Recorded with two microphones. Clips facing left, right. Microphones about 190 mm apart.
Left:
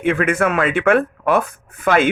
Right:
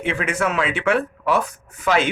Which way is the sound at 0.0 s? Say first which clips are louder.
Left 5 dB; 55° left (ahead or behind).